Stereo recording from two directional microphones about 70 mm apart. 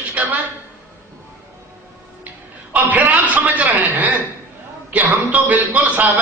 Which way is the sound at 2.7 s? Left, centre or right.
Right.